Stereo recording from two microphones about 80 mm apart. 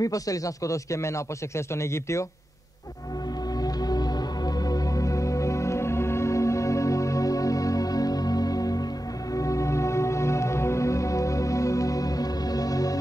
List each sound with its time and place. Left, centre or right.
0.0 s speech: left
3.6 s music: left